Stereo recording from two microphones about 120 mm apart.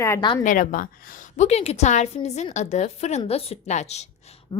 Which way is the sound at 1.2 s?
75° left (ahead or behind).